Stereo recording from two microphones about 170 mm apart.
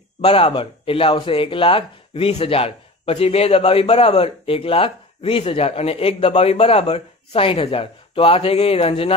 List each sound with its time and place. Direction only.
0.2 s speech: 35° left (ahead or behind)